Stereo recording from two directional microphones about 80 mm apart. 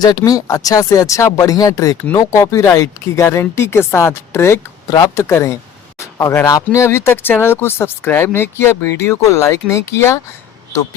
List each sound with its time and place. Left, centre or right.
0.0 s speech: left
4.9 s speech: left
5.1 s speech: left
6.4 s speech: left